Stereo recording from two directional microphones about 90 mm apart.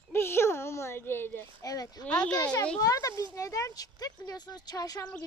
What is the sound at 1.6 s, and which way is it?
Speech, 45° left (ahead or behind).